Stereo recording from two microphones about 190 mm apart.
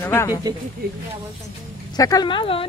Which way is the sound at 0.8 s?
55° right (ahead or behind).